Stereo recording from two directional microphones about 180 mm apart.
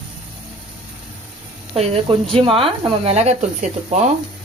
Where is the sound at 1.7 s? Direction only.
35° right (ahead or behind).